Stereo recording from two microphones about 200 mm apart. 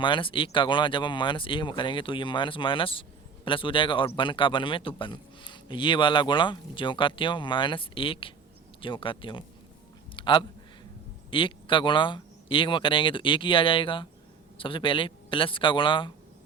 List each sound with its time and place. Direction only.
0.0 s speech: 25° left (ahead or behind)
10.2 s a sound: 25° left (ahead or behind)
11.3 s speech: 25° left (ahead or behind)